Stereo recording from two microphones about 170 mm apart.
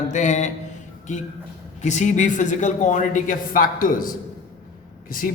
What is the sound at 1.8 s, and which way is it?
A man's voice, 45° left (ahead or behind).